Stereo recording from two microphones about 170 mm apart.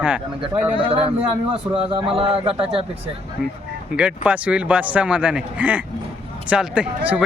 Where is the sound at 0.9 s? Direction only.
35° right (ahead or behind).